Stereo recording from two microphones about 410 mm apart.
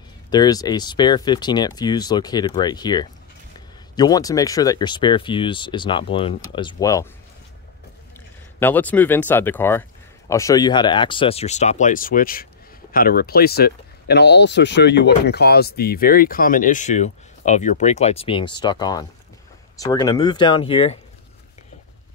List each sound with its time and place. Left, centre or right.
0.3 s speech: centre
8.5 s speech: centre